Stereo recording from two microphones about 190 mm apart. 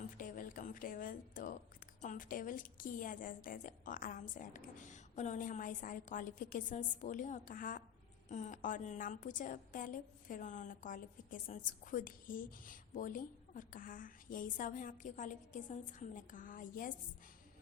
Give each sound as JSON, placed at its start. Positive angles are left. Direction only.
{"t": 0.2, "sound": "a woman's voice", "side_deg": 45}